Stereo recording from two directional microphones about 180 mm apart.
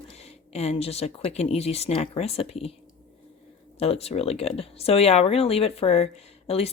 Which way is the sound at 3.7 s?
35° left (ahead or behind).